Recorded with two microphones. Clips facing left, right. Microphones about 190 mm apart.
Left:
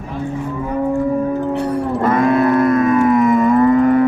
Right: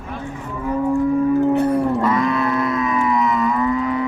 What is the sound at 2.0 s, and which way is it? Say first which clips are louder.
Moo: left 5 dB; 50° left (ahead or behind).